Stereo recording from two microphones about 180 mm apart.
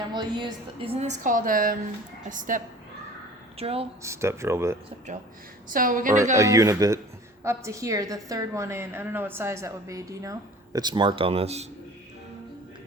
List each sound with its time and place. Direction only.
0.1 s a woman's voice: 25° right (ahead or behind); by 2.7 s 45° right (ahead or behind)
3.6 s a woman's voice: 35° right (ahead or behind)
4.0 s a woman's voice: 15° right (ahead or behind)
5.7 s a woman's voice: 50° right (ahead or behind)
6.3 s a woman's voice: 20° right (ahead or behind); by 11.6 s 35° right (ahead or behind)